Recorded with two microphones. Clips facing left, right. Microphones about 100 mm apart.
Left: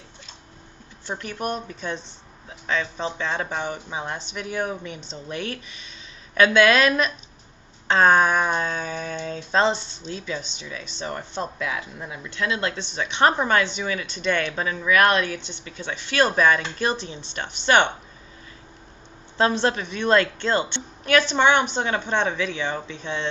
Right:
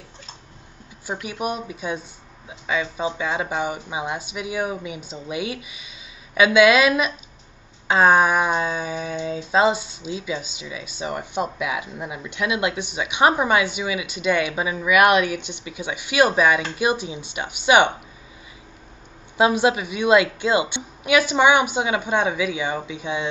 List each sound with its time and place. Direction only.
1.0 s speech: 10° right (ahead or behind)
19.3 s speech: 10° right (ahead or behind)